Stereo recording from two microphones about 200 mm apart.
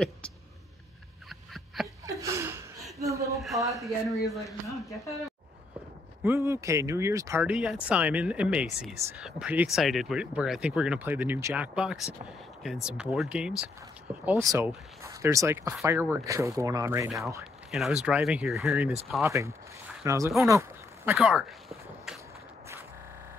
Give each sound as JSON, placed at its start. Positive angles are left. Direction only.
{"t": 2.0, "sound": "a sound", "side_deg": -15}
{"t": 3.0, "sound": "speech", "side_deg": -15}
{"t": 3.8, "sound": "speech", "side_deg": 0}
{"t": 4.6, "sound": "speech", "side_deg": 15}
{"t": 6.2, "sound": "speech", "side_deg": -10}
{"t": 14.2, "sound": "speech", "side_deg": -15}
{"t": 17.6, "sound": "speech", "side_deg": 0}
{"t": 20.1, "sound": "speech", "side_deg": -15}
{"t": 20.4, "sound": "a sound", "side_deg": -10}